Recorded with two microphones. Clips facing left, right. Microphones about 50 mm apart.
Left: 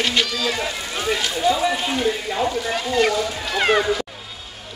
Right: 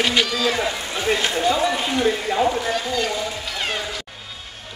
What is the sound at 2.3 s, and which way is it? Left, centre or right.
Speech, right.